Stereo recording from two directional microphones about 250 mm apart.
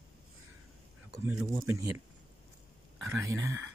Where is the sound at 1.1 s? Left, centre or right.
Centre.